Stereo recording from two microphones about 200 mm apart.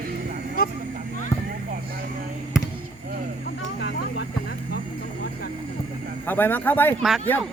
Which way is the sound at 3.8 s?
65° left (ahead or behind).